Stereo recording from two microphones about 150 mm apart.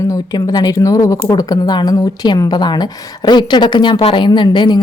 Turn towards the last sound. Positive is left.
turn(degrees=30)  # may be behind; listen again after turning